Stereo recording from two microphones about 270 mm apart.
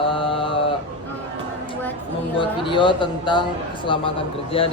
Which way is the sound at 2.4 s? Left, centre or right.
Centre.